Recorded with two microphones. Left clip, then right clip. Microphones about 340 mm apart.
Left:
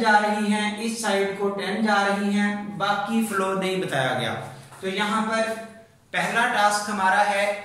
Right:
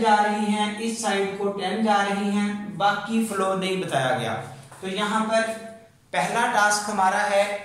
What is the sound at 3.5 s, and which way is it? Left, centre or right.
Speech, centre.